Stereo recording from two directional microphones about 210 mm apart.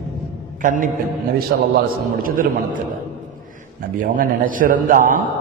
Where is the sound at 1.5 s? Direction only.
50° right (ahead or behind).